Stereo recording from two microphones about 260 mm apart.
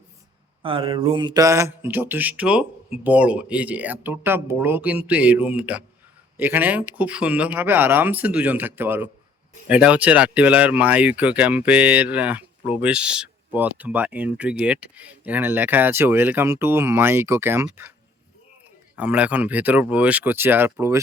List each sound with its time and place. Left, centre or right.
0.6 s speech: centre
18.9 s speech: centre